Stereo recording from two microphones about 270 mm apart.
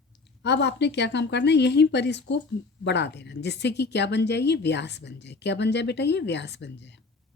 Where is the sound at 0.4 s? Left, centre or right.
Left.